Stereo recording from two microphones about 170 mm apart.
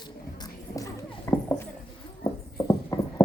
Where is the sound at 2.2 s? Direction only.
20° left (ahead or behind).